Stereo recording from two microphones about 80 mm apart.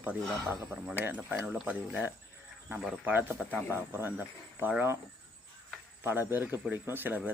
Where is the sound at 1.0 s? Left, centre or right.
Right.